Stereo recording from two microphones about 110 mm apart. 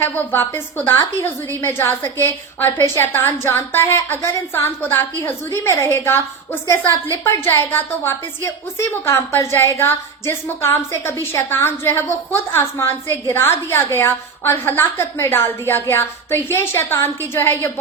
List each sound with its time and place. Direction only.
0.0 s a woman's voice: 20° left (ahead or behind)